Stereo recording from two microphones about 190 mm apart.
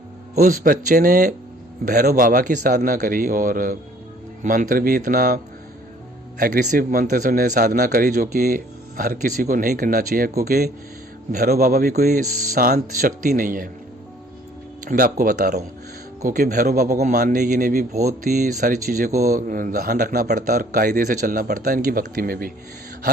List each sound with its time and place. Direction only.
0.3 s a man's voice: 50° right (ahead or behind)
6.4 s a man's voice: 50° right (ahead or behind)
14.8 s a man's voice: 45° right (ahead or behind)